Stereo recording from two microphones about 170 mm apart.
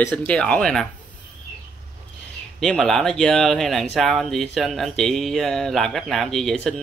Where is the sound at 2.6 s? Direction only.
Centre (ahead or behind).